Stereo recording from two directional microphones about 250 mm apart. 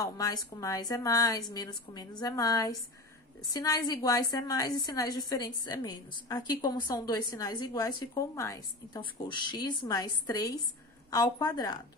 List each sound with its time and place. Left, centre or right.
0.0 s a woman's voice: centre